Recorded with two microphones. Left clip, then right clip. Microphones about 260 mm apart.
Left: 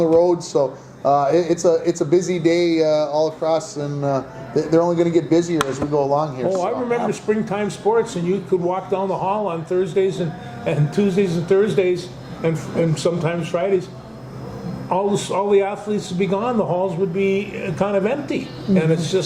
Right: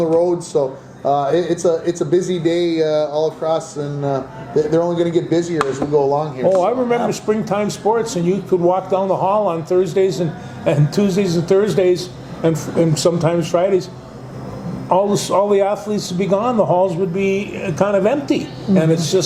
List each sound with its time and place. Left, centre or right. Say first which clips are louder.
0.2 s speech: even; left
6.5 s a man's voice: right 8 dB; right
14.8 s speech: right 5 dB; right